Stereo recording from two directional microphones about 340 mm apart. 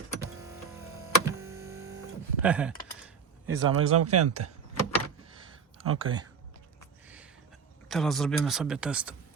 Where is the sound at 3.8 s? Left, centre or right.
Right.